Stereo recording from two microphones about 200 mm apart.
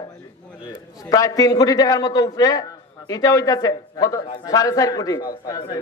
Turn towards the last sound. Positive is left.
turn(degrees=20)  # may be behind; listen again after turning